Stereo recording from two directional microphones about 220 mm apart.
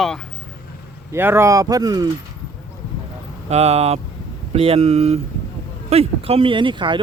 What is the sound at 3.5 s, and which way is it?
Speech, 30° right (ahead or behind).